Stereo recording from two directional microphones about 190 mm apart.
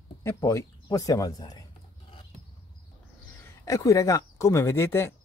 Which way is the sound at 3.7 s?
15° left (ahead or behind).